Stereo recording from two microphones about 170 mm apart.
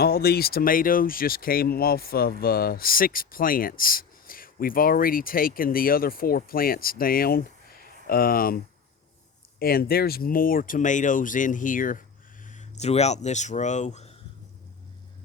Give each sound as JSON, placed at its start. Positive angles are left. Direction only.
{"t": 0.0, "sound": "speech", "side_deg": 65}